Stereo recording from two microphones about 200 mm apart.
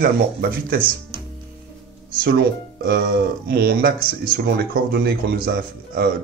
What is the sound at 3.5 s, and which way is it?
Speech, 55° right (ahead or behind).